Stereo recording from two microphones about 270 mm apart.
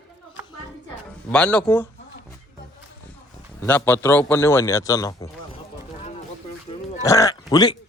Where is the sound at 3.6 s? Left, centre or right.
Centre.